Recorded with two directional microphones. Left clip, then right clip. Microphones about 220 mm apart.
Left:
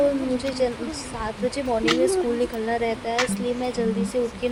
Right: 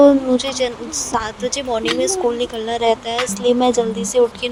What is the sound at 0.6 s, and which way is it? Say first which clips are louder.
A woman's voice: right 4 dB; 40° right (ahead or behind).